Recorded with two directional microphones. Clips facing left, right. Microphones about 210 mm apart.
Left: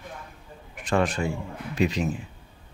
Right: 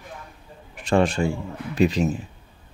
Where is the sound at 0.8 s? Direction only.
30° right (ahead or behind).